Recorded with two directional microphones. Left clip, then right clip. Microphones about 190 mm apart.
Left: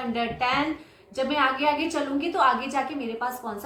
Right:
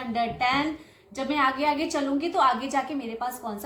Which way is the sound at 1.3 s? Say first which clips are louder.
Even; 40° right (ahead or behind).